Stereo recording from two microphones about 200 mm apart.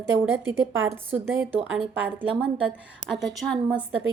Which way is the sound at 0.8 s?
10° right (ahead or behind).